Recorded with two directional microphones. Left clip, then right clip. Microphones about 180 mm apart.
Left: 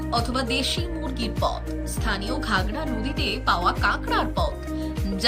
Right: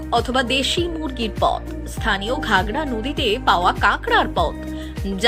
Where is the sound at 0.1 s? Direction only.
15° right (ahead or behind).